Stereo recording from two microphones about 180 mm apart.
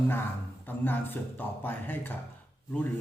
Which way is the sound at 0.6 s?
10° left (ahead or behind).